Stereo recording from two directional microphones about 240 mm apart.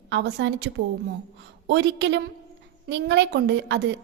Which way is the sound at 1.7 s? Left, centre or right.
Right.